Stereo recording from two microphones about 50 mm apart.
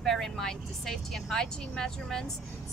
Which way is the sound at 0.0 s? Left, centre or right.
Centre.